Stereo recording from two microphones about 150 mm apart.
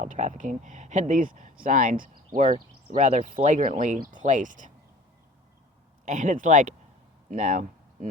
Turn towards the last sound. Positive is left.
turn(degrees=-60)  # may be behind; listen again after turning